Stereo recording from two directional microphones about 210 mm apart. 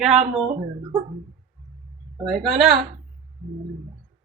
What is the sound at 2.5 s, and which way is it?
Speech, 45° right (ahead or behind).